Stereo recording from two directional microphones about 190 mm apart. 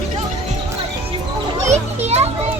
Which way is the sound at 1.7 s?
35° right (ahead or behind).